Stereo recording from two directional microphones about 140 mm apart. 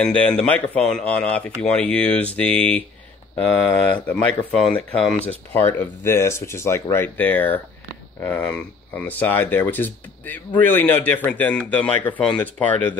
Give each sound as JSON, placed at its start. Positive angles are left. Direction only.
{"t": 0.0, "sound": "speech", "side_deg": 5}
{"t": 4.1, "sound": "speech", "side_deg": 10}